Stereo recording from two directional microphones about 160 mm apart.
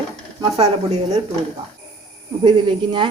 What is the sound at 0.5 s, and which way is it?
Speech, 40° right (ahead or behind).